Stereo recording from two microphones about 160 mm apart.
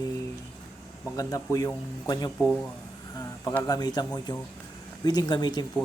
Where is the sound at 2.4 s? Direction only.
5° left (ahead or behind).